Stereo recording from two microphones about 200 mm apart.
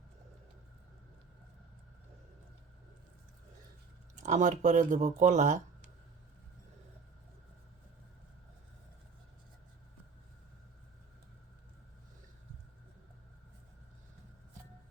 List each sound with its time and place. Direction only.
4.1 s speech: 35° right (ahead or behind)